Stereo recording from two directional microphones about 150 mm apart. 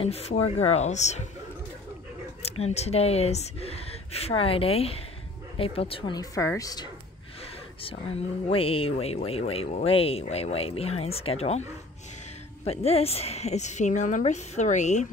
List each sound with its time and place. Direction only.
0.0 s a woman's voice: 40° left (ahead or behind)
2.4 s speech: 45° left (ahead or behind)
6.1 s a woman's voice: 20° left (ahead or behind)
8.5 s speech: 40° left (ahead or behind)
12.6 s a woman's voice: 40° left (ahead or behind)